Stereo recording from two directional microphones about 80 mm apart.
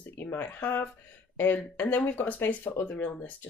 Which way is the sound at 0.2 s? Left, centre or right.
Left.